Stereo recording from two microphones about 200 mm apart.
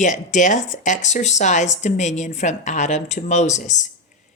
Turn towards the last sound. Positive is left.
turn(degrees=35)  # may be behind; listen again after turning